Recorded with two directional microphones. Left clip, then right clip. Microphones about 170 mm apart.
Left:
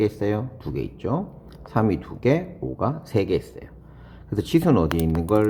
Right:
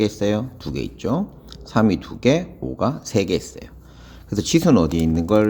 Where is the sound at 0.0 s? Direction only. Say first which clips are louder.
Right 3 dB; 25° right (ahead or behind).